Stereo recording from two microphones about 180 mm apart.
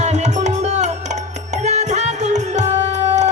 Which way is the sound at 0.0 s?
40° right (ahead or behind).